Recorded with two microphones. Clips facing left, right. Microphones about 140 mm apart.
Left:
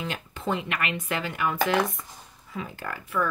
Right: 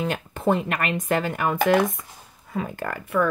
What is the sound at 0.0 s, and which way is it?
A woman's voice, 50° right (ahead or behind).